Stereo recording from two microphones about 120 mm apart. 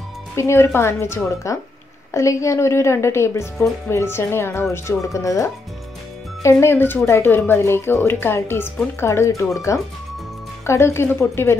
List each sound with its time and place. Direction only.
0.4 s a woman's voice: 20° left (ahead or behind)